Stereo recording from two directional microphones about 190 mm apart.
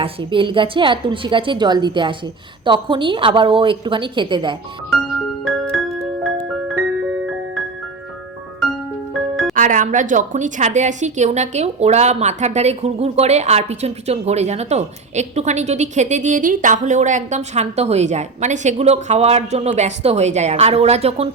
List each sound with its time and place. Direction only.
0.0 s a woman's voice: 25° right (ahead or behind)
5.7 s music: centre (ahead or behind)
9.3 s music: centre (ahead or behind)
9.6 s a woman's voice: 45° right (ahead or behind)